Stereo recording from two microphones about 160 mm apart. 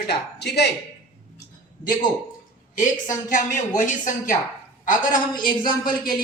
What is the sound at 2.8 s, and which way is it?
Speech, 55° left (ahead or behind).